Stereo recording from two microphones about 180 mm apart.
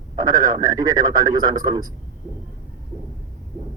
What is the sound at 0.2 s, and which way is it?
Speech, 20° right (ahead or behind).